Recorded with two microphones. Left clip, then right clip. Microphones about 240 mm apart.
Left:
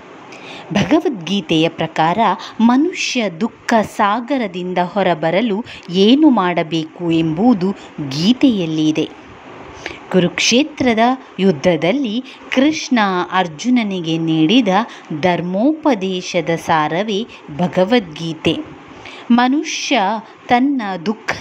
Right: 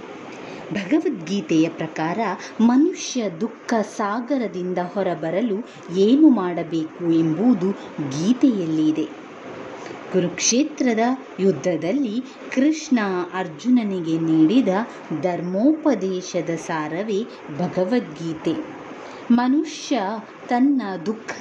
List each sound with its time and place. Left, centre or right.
0.7 s a woman's voice: centre
10.1 s speech: left